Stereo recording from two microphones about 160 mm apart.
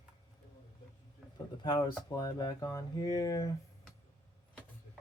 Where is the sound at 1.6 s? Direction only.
25° left (ahead or behind).